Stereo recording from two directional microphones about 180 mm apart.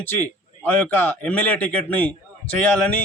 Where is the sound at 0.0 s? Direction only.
10° left (ahead or behind).